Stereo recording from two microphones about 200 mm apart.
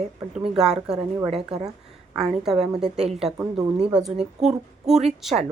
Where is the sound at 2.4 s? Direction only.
Centre (ahead or behind).